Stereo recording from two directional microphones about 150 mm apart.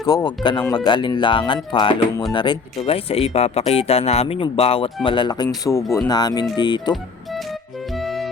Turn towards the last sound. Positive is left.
turn(degrees=30)  # may be behind; listen again after turning